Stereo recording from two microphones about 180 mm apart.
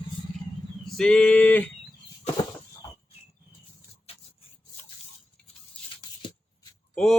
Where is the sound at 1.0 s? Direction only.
5° left (ahead or behind).